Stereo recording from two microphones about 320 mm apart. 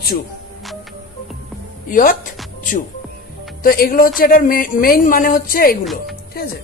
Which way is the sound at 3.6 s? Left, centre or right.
Left.